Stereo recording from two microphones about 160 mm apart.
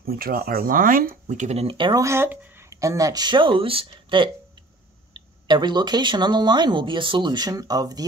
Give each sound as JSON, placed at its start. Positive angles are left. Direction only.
{"t": 0.0, "sound": "speech", "side_deg": -70}
{"t": 1.2, "sound": "speech", "side_deg": -45}
{"t": 2.0, "sound": "speech", "side_deg": -15}